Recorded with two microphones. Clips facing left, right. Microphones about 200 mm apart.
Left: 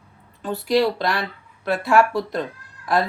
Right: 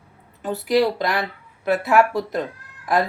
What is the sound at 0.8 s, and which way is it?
Speech, 20° right (ahead or behind).